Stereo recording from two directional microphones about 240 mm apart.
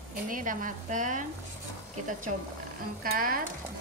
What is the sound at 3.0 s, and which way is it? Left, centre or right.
Speech, right.